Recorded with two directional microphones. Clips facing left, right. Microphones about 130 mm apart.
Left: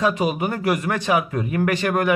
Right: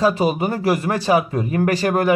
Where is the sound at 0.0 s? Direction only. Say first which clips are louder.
Right 3 dB; 30° right (ahead or behind).